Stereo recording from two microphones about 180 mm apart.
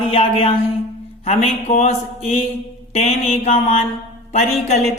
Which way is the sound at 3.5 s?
35° left (ahead or behind).